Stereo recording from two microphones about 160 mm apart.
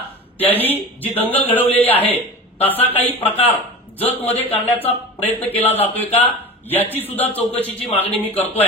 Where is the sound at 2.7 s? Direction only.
40° left (ahead or behind).